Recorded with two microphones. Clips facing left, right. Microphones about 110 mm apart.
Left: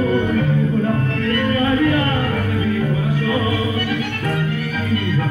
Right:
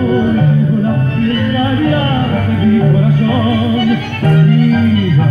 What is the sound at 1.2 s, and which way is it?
Music, 30° right (ahead or behind).